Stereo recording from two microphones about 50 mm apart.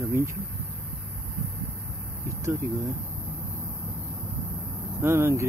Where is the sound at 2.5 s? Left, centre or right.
Right.